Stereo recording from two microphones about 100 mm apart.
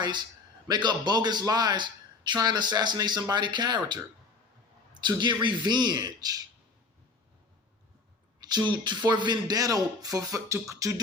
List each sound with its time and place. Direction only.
0.0 s a man's voice: 50° right (ahead or behind)
8.4 s speech: 45° right (ahead or behind)